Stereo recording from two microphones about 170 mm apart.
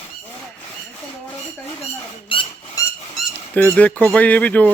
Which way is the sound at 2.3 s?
30° left (ahead or behind).